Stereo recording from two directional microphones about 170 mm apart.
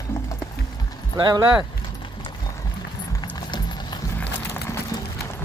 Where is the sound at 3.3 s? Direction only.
25° left (ahead or behind).